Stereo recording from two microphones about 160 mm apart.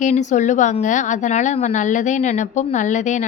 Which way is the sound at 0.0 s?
50° left (ahead or behind).